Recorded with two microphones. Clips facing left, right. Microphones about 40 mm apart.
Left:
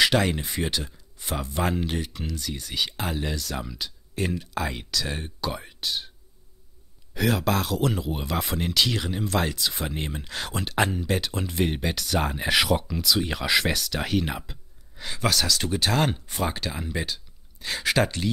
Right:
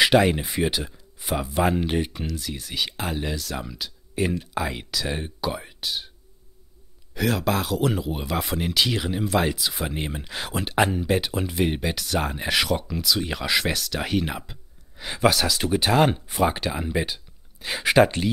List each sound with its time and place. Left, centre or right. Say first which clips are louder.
0.0 s speech: right 4 dB; centre
2.0 s speech: right 6 dB; right
2.2 s speech: right 1 dB; centre
7.2 s speech: even; centre
15.0 s speech: right 4 dB; centre